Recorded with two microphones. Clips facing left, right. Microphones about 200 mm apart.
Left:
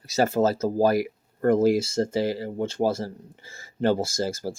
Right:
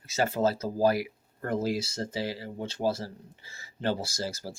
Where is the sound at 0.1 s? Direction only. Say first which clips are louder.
Left 5 dB; 40° left (ahead or behind).